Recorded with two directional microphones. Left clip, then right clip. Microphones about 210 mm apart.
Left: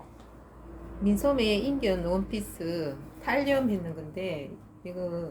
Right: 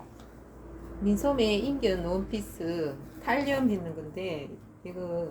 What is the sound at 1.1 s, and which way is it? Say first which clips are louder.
A woman's voice: left 1 dB; 25° left (ahead or behind).